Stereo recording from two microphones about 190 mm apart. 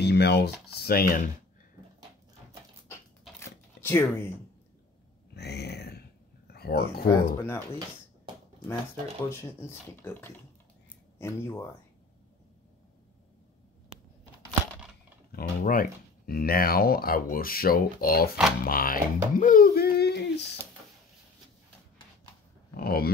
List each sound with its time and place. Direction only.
0.0 s speech: 60° left (ahead or behind)
2.9 s a sound: 15° left (ahead or behind)
5.3 s a sound: 60° left (ahead or behind)
7.1 s speech: 15° left (ahead or behind)
9.3 s speech: 15° left (ahead or behind)
15.3 s speech: 50° left (ahead or behind)
22.8 s speech: 55° left (ahead or behind)